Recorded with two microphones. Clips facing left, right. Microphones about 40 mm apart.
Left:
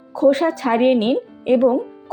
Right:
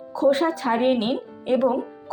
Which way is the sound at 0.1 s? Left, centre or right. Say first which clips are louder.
Left 4 dB; left.